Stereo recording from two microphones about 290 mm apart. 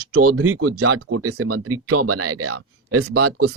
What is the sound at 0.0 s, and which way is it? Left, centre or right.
Speech, right.